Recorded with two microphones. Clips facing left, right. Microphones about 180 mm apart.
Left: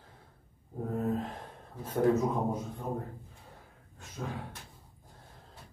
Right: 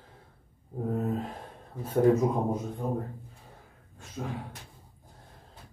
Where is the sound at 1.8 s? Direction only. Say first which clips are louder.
Right 4 dB; 10° right (ahead or behind).